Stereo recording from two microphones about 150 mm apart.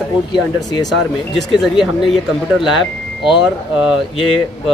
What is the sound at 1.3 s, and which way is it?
Speech, centre (ahead or behind).